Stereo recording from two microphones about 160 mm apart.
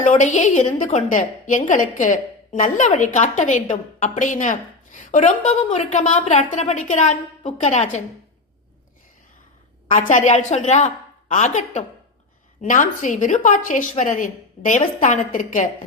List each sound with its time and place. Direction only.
0.0 s a woman's voice: 50° left (ahead or behind)
9.9 s a woman's voice: 50° left (ahead or behind)